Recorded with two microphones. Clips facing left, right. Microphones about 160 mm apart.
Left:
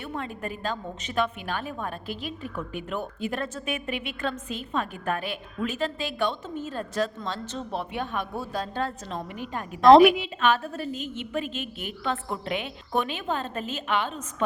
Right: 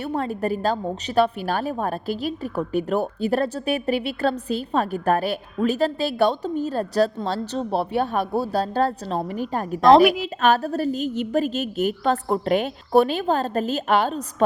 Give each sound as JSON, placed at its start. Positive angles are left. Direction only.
{"t": 0.0, "sound": "a woman's voice", "side_deg": -35}
{"t": 9.8, "sound": "a woman's voice", "side_deg": 0}
{"t": 10.2, "sound": "a woman's voice", "side_deg": -40}